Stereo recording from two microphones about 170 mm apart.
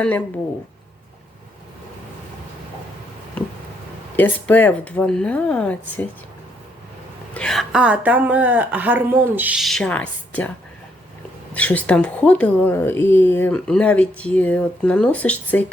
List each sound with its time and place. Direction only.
4.2 s a woman's voice: 10° left (ahead or behind)
7.3 s a woman's voice: 5° left (ahead or behind)
11.5 s a woman's voice: 10° left (ahead or behind)